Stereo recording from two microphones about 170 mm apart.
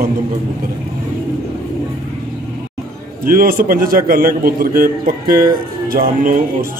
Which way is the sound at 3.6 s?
55° right (ahead or behind).